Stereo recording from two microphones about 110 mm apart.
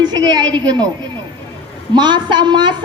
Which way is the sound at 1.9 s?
45° right (ahead or behind).